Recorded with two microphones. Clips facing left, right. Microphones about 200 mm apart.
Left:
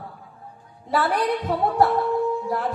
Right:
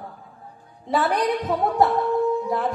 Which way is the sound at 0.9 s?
20° right (ahead or behind).